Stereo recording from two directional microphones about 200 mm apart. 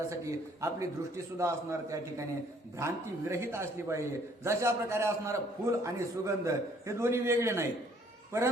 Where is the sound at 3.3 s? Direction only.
15° right (ahead or behind).